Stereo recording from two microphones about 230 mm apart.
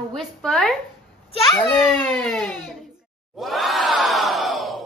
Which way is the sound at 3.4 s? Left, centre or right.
Centre.